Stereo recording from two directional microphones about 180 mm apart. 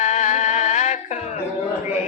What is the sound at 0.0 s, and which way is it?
Music, 45° left (ahead or behind).